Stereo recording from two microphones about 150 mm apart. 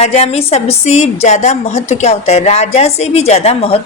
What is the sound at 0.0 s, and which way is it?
A woman's voice, 45° left (ahead or behind).